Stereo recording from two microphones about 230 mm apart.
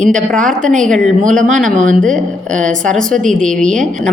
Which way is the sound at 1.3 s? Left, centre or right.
Right.